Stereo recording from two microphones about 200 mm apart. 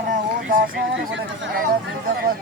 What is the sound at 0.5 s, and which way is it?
Speech, 45° right (ahead or behind).